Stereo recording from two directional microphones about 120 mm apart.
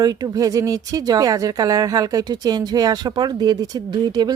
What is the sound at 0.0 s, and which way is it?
Speech, 30° right (ahead or behind).